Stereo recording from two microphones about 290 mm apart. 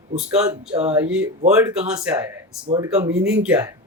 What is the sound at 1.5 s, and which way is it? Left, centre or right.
Speech, centre.